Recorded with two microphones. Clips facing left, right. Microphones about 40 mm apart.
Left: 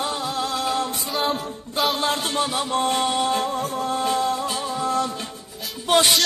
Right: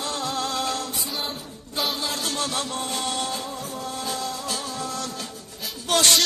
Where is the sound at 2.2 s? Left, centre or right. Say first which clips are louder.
Left 4 dB; left.